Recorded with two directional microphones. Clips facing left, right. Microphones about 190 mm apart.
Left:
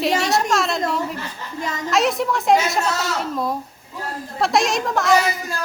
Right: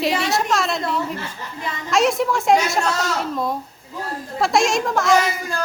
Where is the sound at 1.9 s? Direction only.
Centre (ahead or behind).